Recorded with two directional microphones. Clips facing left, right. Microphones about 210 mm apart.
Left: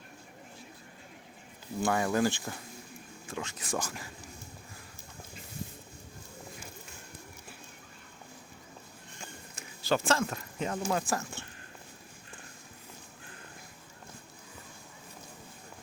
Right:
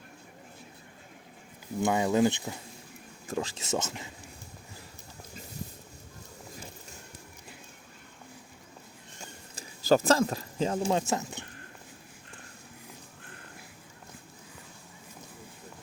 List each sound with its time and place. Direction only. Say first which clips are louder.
1.8 s speech: right 3 dB; 20° right (ahead or behind)
3.2 s speech: right 6 dB; 35° right (ahead or behind)
9.6 s speech: right 6 dB; 40° right (ahead or behind); by 11.4 s 20° right (ahead or behind)